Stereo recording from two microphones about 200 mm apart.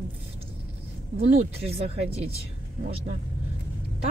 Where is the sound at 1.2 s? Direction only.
30° right (ahead or behind).